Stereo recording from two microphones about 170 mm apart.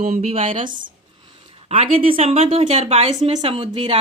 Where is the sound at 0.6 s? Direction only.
50° right (ahead or behind).